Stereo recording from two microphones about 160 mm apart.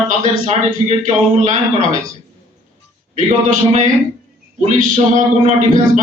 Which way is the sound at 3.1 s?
50° right (ahead or behind).